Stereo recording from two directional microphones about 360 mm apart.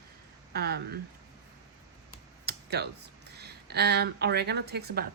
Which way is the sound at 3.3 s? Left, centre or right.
Right.